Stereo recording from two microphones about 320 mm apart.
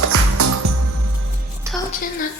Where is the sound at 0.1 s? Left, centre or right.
Right.